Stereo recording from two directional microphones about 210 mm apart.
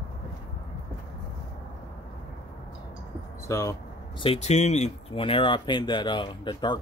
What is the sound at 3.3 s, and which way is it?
Speech, 15° left (ahead or behind).